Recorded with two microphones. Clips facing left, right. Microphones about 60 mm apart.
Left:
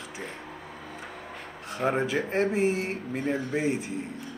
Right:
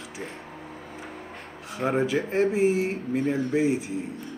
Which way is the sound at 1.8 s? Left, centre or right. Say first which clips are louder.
Right 2 dB; centre.